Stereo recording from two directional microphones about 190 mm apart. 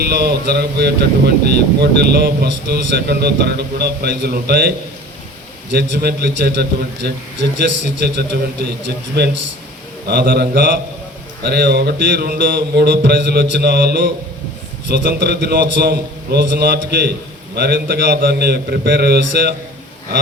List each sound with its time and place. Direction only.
0.0 s a man's voice: 55° right (ahead or behind)
5.7 s a man's voice: 55° right (ahead or behind)